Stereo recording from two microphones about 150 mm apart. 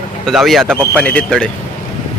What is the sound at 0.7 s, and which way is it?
Speech, 15° right (ahead or behind).